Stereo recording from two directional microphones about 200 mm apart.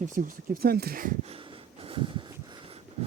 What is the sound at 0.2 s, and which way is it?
Speech, 45° right (ahead or behind).